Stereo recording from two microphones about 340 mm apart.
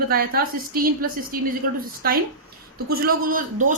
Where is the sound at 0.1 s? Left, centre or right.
Right.